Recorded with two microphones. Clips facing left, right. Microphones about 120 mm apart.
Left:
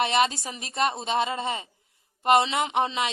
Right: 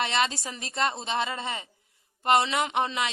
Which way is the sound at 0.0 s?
20° left (ahead or behind).